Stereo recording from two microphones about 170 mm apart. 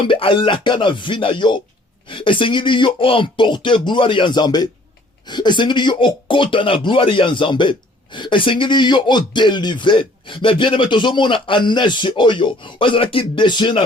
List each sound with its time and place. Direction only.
0.0 s speech: 30° left (ahead or behind)